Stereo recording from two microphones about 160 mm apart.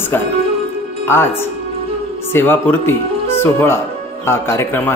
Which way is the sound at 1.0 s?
15° left (ahead or behind).